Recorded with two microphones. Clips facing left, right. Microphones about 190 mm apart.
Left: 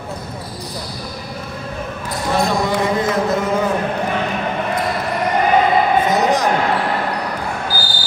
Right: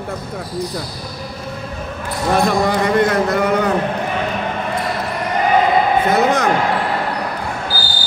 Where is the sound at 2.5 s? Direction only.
60° right (ahead or behind).